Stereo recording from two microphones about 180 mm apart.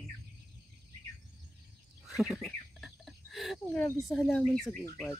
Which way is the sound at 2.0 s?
Centre (ahead or behind).